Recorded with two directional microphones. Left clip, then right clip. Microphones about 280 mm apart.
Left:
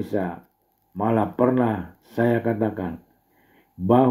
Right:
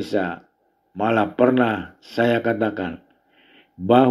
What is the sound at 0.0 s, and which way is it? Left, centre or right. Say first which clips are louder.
Speech: right 3 dB; right.